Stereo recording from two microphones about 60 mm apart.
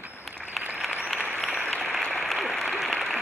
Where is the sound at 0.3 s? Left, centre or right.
Right.